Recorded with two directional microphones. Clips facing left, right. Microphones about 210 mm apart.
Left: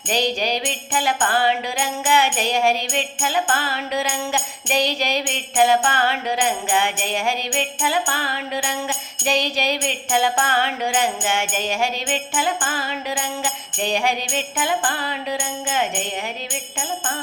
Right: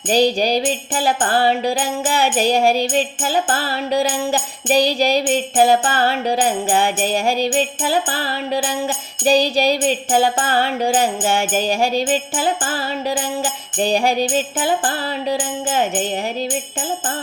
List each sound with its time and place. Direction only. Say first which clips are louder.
0.1 s music: right 6 dB; 35° right (ahead or behind)